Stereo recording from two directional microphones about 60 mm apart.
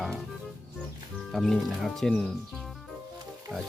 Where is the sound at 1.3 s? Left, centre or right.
Centre.